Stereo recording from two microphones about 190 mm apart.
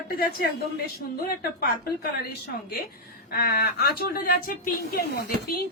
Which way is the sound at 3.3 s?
55° left (ahead or behind).